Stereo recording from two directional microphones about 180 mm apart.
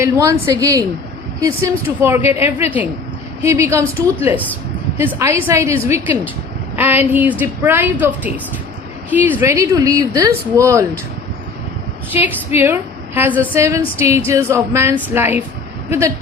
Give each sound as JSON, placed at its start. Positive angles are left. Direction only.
{"t": 0.0, "sound": "a woman's voice", "side_deg": -15}
{"t": 12.1, "sound": "a woman's voice", "side_deg": -10}